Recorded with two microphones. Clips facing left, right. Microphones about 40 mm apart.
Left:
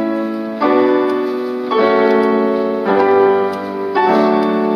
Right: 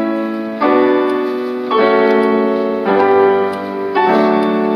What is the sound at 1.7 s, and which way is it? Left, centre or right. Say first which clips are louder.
Music: right 1 dB; centre.